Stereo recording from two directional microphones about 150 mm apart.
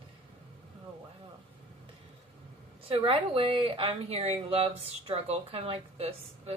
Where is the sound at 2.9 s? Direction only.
40° right (ahead or behind).